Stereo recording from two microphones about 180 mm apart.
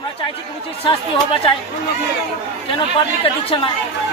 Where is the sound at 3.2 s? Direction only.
30° left (ahead or behind).